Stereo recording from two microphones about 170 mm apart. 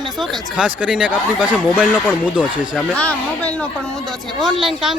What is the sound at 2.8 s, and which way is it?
Speech, 5° left (ahead or behind).